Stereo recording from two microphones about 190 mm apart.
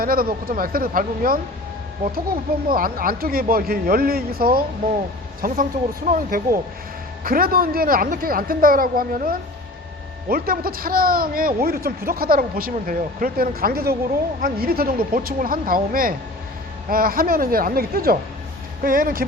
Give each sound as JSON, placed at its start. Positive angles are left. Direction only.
{"t": 0.0, "sound": "a man's voice", "side_deg": -50}